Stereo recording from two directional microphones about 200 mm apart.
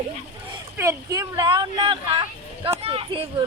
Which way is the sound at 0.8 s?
15° right (ahead or behind).